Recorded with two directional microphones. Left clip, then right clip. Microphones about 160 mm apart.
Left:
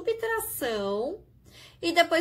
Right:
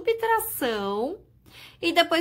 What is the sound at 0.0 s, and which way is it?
A woman's voice, 30° right (ahead or behind).